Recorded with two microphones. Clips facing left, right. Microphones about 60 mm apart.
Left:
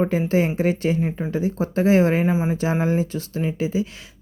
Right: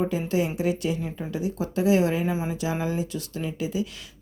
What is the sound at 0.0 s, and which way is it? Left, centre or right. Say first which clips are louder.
Speech: left 5 dB; left.